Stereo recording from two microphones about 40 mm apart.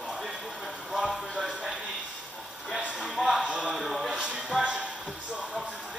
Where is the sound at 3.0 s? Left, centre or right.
Centre.